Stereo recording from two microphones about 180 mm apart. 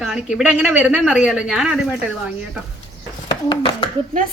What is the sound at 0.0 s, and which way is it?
A woman's voice, centre (ahead or behind).